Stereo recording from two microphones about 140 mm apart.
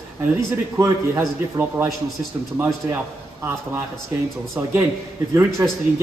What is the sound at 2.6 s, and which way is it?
Speech, 20° right (ahead or behind).